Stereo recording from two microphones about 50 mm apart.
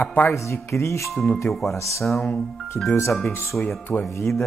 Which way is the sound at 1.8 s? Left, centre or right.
Left.